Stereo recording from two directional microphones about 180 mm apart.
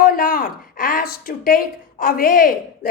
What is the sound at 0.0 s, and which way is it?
A woman's voice, 55° left (ahead or behind).